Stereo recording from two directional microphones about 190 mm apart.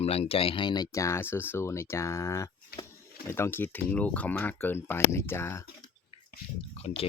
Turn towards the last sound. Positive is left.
turn(degrees=35)  # may be behind; listen again after turning